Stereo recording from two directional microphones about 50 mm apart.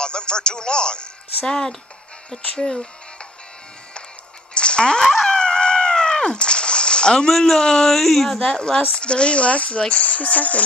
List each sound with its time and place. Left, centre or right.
0.0 s speech: centre
4.6 s a sound: centre
5.3 s cat: centre
8.5 s speech: centre